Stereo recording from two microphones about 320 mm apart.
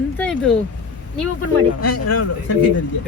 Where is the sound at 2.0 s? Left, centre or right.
Left.